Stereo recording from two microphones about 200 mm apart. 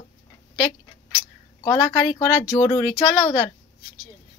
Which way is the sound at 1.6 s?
20° left (ahead or behind).